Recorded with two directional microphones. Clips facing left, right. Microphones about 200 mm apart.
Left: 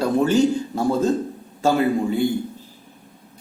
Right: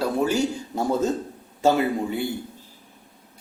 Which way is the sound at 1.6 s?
20° right (ahead or behind).